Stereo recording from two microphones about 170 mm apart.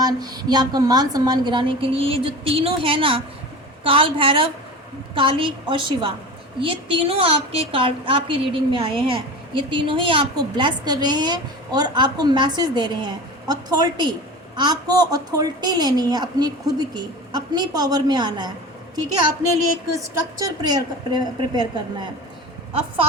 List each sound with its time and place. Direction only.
0.0 s a woman's voice: 25° right (ahead or behind)
19.9 s a woman's voice: 20° right (ahead or behind)